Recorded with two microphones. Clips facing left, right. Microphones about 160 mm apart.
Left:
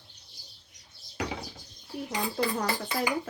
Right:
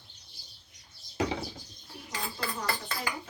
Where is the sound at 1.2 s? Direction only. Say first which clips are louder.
Right 4 dB; 25° right (ahead or behind).